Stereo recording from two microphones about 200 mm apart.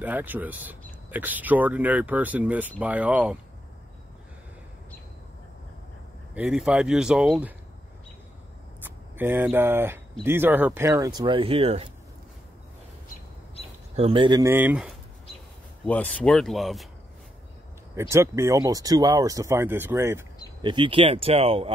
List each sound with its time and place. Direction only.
0.0 s speech: 10° right (ahead or behind)
6.3 s speech: 5° right (ahead or behind)
8.8 s speech: 10° right (ahead or behind); by 11.9 s 30° right (ahead or behind)
13.9 s speech: 30° right (ahead or behind)
14.5 s speech: 10° right (ahead or behind)
15.8 s speech: 5° left (ahead or behind)
17.9 s speech: 15° right (ahead or behind)
20.6 s speech: 25° right (ahead or behind)